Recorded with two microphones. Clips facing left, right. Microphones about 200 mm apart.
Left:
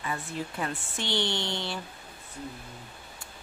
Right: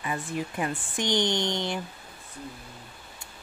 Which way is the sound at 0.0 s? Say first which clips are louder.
Right 3 dB; 15° right (ahead or behind).